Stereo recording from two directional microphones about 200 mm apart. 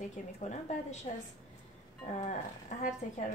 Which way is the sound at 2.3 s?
35° left (ahead or behind).